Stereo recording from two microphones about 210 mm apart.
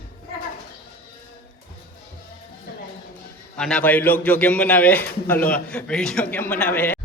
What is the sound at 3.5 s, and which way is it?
A man's voice, 5° left (ahead or behind).